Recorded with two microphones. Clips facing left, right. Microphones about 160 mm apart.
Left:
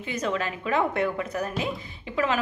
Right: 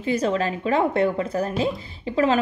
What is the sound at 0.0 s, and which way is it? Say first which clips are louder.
A woman's voice: right 6 dB; 35° right (ahead or behind).